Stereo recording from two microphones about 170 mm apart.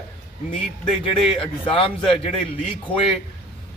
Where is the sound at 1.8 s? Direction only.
30° left (ahead or behind).